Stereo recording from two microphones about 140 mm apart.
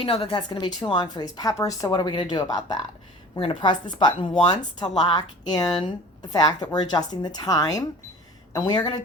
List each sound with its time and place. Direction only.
0.0 s a woman's voice: 45° left (ahead or behind)